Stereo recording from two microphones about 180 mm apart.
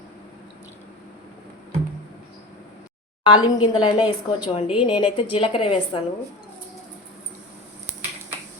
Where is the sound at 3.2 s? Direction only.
25° left (ahead or behind).